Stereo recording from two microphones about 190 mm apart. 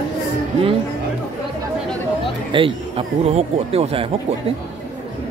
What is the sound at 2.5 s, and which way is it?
Speech, 25° right (ahead or behind).